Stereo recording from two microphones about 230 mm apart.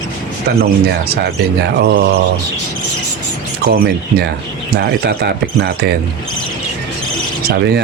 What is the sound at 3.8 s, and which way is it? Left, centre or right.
Speech, right.